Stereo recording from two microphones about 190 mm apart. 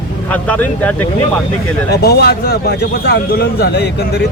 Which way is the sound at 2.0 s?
55° left (ahead or behind).